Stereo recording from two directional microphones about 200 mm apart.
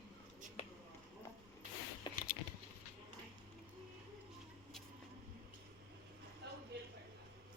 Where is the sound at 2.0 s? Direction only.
20° left (ahead or behind).